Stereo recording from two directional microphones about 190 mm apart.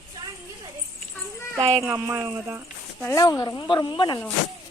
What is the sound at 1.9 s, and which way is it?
Speech, 10° right (ahead or behind).